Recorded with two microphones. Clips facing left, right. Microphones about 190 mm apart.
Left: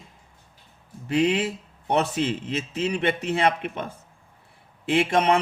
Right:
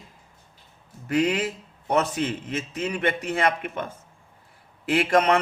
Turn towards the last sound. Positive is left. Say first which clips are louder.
# even
turn(degrees=25)  # may be behind; listen again after turning